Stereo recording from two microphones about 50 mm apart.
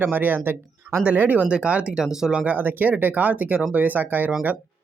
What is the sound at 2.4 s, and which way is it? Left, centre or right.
Speech, right.